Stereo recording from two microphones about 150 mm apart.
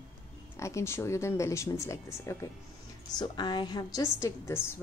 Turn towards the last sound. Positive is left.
turn(degrees=15)  # may be behind; listen again after turning